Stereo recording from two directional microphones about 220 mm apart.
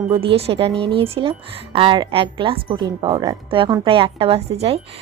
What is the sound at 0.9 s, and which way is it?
Speech, 25° right (ahead or behind).